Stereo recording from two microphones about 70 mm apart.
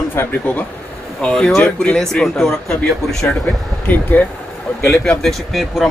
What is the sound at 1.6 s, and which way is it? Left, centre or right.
Speech, centre.